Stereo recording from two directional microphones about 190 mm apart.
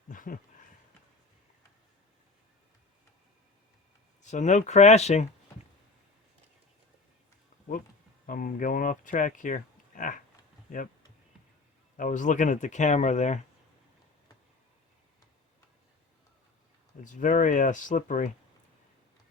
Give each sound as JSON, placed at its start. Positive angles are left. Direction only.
{"t": 0.1, "sound": "a sound", "side_deg": 45}
{"t": 4.2, "sound": "speech", "side_deg": 40}
{"t": 8.3, "sound": "speech", "side_deg": 45}
{"t": 11.9, "sound": "speech", "side_deg": 40}
{"t": 17.0, "sound": "speech", "side_deg": 40}